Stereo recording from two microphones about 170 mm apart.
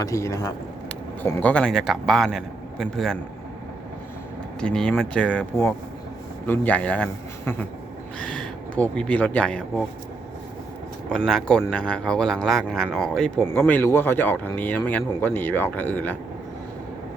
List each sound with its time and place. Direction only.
0.0 s a man's voice: 20° left (ahead or behind); by 3.2 s centre (ahead or behind)
4.6 s a man's voice: 5° left (ahead or behind)
11.2 s speech: 5° left (ahead or behind)